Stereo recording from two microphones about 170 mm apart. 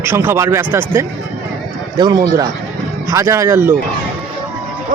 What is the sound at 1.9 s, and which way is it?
A man's voice, 25° right (ahead or behind).